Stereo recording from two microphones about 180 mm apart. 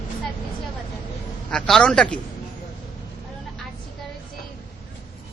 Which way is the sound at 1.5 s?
5° left (ahead or behind).